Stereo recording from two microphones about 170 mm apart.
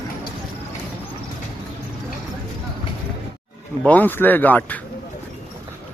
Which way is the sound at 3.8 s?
10° left (ahead or behind).